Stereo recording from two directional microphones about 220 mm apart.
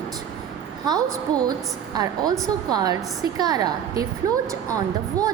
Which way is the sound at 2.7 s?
15° right (ahead or behind).